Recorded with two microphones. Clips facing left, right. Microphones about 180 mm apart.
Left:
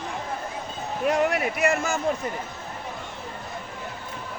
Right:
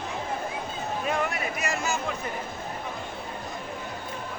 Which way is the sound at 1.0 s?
70° left (ahead or behind).